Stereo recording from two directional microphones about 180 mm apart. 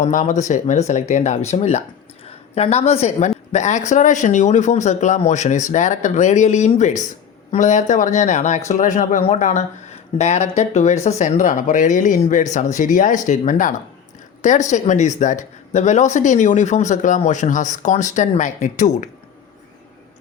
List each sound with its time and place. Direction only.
0.0 s a woman's voice: 45° left (ahead or behind)